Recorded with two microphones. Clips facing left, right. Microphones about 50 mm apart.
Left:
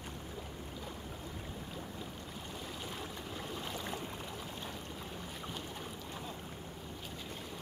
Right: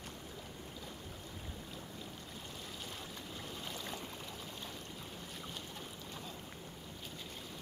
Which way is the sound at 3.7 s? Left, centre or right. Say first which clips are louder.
Left 4 dB; centre.